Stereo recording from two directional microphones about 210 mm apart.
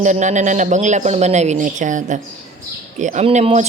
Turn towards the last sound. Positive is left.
turn(degrees=-35)  # may be behind; listen again after turning